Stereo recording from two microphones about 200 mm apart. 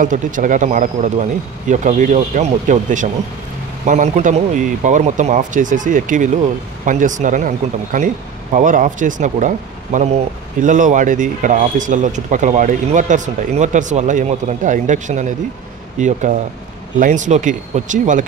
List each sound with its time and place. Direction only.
0.0 s speech: 40° right (ahead or behind)